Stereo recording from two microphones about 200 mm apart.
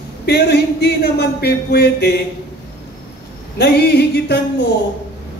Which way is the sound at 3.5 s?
55° left (ahead or behind).